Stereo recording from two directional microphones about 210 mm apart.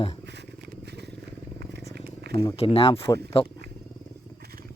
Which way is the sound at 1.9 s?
50° right (ahead or behind).